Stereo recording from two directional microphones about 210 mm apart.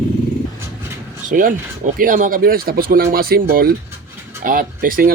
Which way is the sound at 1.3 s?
45° right (ahead or behind).